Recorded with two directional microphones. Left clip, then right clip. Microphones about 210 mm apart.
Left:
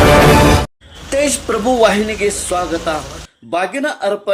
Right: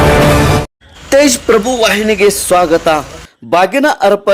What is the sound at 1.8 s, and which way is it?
Speech, 45° right (ahead or behind).